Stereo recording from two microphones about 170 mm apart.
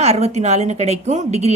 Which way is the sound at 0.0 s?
40° right (ahead or behind).